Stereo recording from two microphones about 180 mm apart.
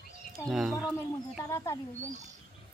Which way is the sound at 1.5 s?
15° left (ahead or behind).